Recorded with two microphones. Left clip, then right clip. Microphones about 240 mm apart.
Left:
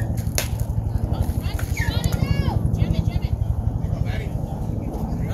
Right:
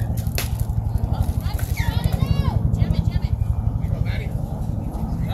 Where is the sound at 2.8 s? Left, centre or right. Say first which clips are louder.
Even; right.